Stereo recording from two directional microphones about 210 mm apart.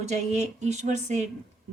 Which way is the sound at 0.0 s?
35° right (ahead or behind).